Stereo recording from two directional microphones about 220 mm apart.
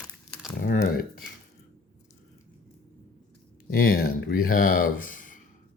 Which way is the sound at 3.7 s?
45° left (ahead or behind).